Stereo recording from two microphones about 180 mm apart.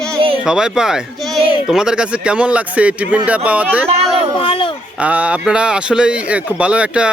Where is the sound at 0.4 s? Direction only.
5° right (ahead or behind).